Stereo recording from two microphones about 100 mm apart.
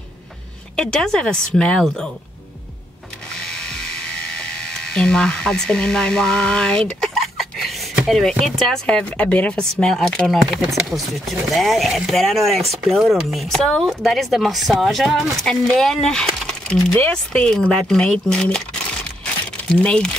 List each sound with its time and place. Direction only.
0.7 s speech: 5° left (ahead or behind)
3.3 s a sound: 5° left (ahead or behind)
4.4 s speech: 10° left (ahead or behind)